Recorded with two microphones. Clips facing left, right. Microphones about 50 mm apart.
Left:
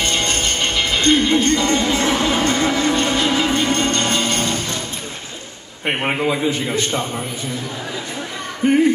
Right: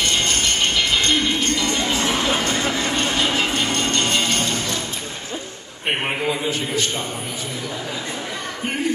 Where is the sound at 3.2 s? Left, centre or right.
Right.